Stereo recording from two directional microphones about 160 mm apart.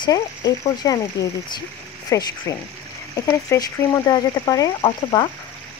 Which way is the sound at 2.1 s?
20° left (ahead or behind).